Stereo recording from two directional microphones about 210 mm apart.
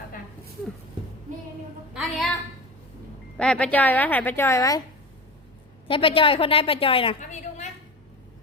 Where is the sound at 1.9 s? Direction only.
Centre (ahead or behind).